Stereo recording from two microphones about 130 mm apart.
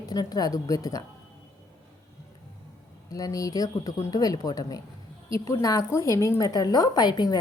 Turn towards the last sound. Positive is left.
turn(degrees=35)  # may be behind; listen again after turning